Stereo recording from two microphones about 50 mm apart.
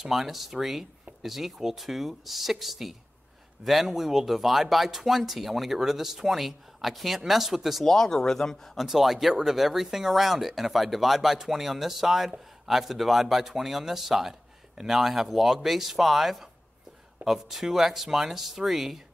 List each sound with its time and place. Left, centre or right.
0.0 s speech: centre
7.8 s speech: centre
8.7 s speech: centre